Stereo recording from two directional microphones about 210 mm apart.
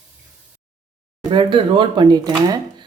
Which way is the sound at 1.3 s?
25° right (ahead or behind).